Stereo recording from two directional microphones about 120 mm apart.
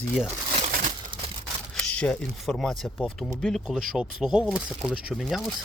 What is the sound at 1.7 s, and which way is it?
Speech, 10° left (ahead or behind).